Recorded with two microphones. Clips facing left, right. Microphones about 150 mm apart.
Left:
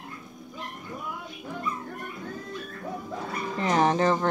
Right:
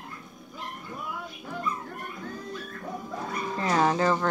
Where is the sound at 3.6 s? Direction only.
20° left (ahead or behind).